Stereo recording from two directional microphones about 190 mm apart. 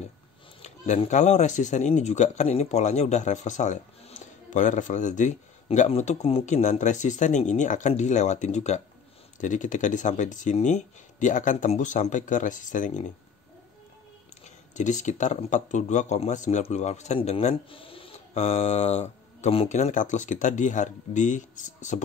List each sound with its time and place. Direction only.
0.6 s a man's voice: 35° left (ahead or behind)
14.4 s a man's voice: 40° left (ahead or behind)